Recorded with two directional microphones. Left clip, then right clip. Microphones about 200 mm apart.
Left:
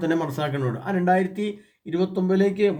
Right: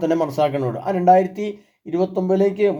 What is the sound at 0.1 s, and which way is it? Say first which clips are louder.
Speech: right 6 dB; 10° left (ahead or behind).